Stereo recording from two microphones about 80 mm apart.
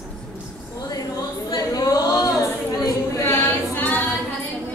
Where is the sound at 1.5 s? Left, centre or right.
Left.